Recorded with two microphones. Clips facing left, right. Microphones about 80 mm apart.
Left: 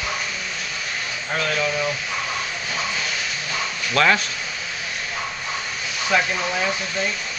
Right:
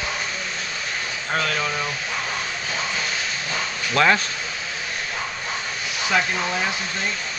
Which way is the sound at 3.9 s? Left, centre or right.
Centre.